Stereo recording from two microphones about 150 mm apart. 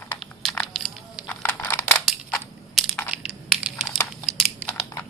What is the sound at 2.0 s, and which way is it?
Crushing, centre (ahead or behind).